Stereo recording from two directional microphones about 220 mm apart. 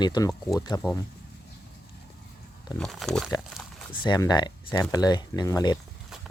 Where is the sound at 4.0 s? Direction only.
20° left (ahead or behind).